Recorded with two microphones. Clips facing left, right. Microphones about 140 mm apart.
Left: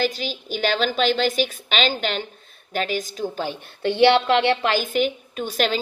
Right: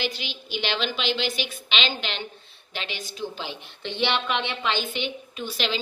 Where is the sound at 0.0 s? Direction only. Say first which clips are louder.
Left 7 dB; 40° left (ahead or behind).